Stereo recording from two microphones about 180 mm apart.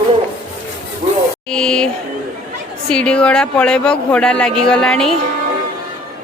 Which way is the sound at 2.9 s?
5° left (ahead or behind).